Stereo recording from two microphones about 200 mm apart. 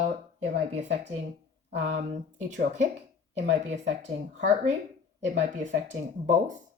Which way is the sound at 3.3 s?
35° right (ahead or behind).